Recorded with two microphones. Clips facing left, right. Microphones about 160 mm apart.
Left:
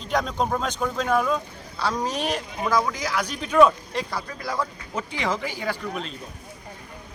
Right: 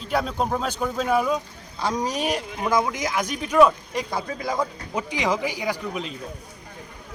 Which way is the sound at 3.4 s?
Centre (ahead or behind).